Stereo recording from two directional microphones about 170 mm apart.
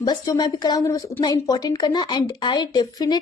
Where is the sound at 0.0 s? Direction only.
25° left (ahead or behind).